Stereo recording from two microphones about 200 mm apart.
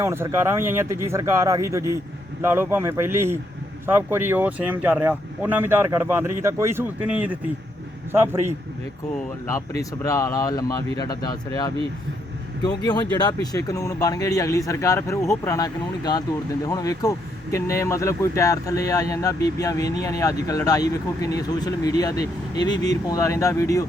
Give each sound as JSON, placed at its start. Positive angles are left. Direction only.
{"t": 0.0, "sound": "speech", "side_deg": -15}
{"t": 10.0, "sound": "speech", "side_deg": 15}